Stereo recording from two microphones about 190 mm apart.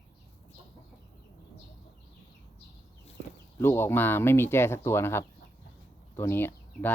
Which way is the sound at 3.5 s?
10° left (ahead or behind).